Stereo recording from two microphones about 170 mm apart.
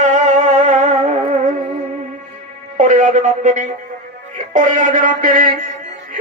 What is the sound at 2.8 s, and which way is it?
A man's voice, 45° right (ahead or behind).